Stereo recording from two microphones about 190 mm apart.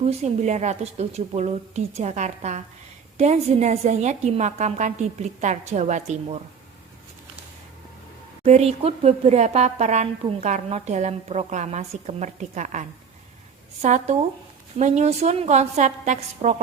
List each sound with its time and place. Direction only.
0.1 s speech: 35° right (ahead or behind)
8.4 s speech: 35° right (ahead or behind)
13.8 s speech: 40° right (ahead or behind)